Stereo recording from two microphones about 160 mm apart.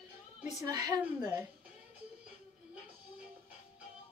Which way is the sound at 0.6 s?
25° right (ahead or behind).